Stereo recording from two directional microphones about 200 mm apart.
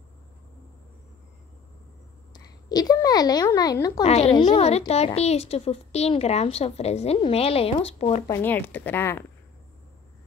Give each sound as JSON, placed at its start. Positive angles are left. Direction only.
{"t": 2.3, "sound": "speech", "side_deg": 20}
{"t": 4.0, "sound": "speech", "side_deg": 30}
{"t": 4.4, "sound": "a woman's voice", "side_deg": 20}
{"t": 4.6, "sound": "speech", "side_deg": 30}
{"t": 8.3, "sound": "speech", "side_deg": 10}